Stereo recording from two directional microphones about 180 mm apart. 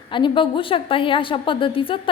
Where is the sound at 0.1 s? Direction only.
25° left (ahead or behind).